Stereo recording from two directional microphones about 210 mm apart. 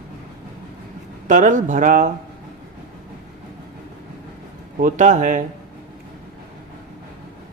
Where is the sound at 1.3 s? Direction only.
35° right (ahead or behind).